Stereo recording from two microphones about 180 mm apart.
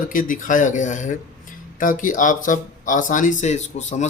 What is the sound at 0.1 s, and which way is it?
Speech, 50° left (ahead or behind).